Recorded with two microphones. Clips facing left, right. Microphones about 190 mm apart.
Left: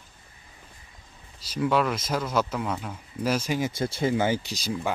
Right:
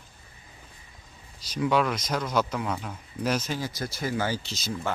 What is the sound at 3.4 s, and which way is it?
Speech, 20° left (ahead or behind).